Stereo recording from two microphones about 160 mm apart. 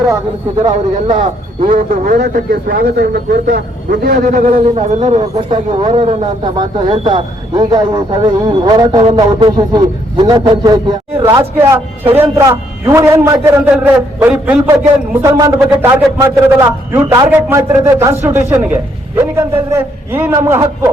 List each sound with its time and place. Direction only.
0.7 s a man's voice: 35° right (ahead or behind)
2.1 s speech: 75° right (ahead or behind); by 5.5 s 45° right (ahead or behind)
6.1 s a man's voice: 30° right (ahead or behind)